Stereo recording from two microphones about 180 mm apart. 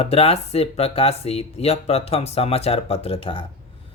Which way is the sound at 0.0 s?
35° left (ahead or behind).